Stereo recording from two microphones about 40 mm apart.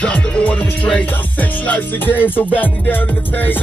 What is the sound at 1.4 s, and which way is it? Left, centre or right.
Music, left.